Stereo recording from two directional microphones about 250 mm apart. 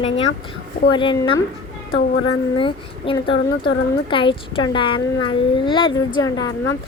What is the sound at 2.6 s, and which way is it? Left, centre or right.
A woman's voice, left.